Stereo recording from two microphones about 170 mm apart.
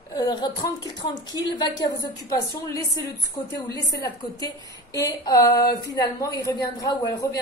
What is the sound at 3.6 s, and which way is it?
A woman's voice, 20° left (ahead or behind).